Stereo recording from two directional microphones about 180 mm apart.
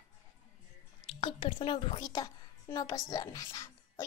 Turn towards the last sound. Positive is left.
turn(degrees=20)  # may be behind; listen again after turning